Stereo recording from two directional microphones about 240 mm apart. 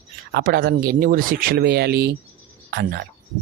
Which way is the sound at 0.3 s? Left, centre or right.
Right.